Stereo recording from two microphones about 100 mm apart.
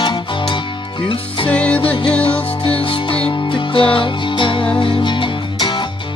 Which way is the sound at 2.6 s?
65° left (ahead or behind).